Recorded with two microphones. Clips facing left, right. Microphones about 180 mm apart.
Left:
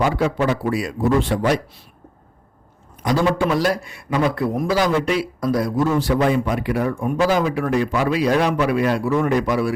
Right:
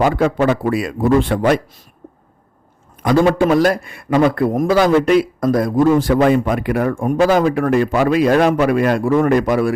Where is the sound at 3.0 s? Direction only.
50° right (ahead or behind).